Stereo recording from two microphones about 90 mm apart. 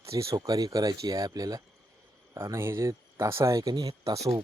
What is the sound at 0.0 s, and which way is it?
Speech, 35° right (ahead or behind).